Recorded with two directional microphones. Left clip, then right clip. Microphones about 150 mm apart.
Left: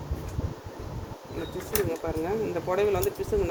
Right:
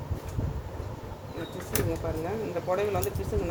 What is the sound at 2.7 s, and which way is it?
Speech, 65° left (ahead or behind).